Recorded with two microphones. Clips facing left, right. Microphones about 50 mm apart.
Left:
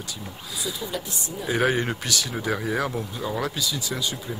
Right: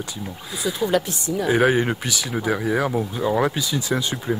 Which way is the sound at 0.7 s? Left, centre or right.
Right.